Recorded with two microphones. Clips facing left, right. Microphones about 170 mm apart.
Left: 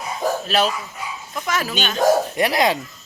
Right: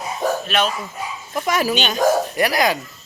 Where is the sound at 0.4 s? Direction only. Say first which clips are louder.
Left 1 dB; 35° left (ahead or behind).